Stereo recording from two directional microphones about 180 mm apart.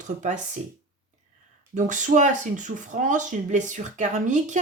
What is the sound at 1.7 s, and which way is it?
Speech, 45° right (ahead or behind).